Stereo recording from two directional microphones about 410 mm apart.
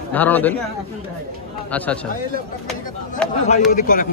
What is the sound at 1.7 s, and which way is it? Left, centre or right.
Speech, centre.